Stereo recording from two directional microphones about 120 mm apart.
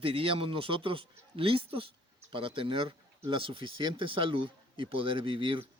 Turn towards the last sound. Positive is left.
turn(degrees=-45)  # may be behind; listen again after turning